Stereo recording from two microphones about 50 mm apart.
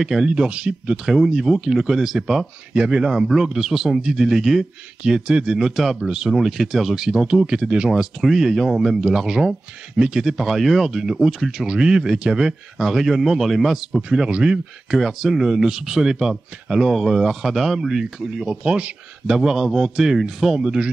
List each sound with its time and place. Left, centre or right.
0.0 s speech: centre
1.0 s speech: centre
5.0 s speech: centre
7.9 s speech: centre
11.6 s speech: centre
14.0 s speech: centre
19.3 s speech: centre